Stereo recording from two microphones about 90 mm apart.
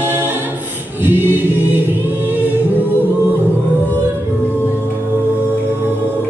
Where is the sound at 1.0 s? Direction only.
20° right (ahead or behind).